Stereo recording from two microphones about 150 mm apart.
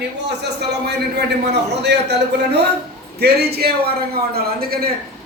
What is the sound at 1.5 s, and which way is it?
A man's voice, 90° right.